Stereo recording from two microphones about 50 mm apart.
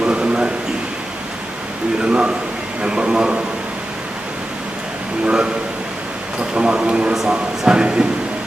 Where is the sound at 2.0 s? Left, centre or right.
Centre.